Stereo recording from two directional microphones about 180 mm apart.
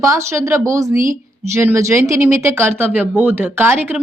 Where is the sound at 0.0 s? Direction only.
15° right (ahead or behind).